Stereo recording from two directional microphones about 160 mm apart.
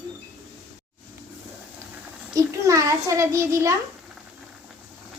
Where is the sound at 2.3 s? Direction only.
20° right (ahead or behind).